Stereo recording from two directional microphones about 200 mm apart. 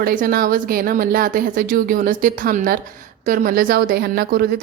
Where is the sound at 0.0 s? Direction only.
45° right (ahead or behind).